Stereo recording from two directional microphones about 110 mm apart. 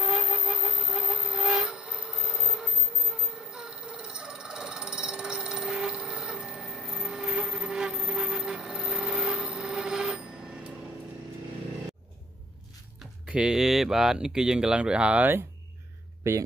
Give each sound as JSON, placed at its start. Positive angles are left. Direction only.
{"t": 0.0, "sound": "music", "side_deg": -5}
{"t": 3.3, "sound": "a sound", "side_deg": -5}
{"t": 13.0, "sound": "speech", "side_deg": -5}
{"t": 16.2, "sound": "speech", "side_deg": -25}